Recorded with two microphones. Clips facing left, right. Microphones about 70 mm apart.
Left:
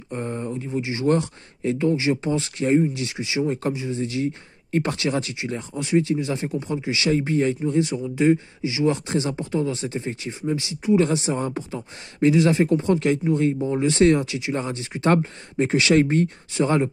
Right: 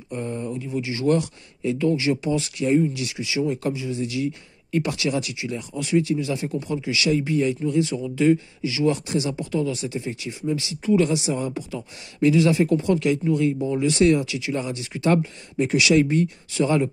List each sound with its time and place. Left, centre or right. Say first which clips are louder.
0.1 s speech: even; left
11.0 s speech: even; left
16.5 s speech: even; left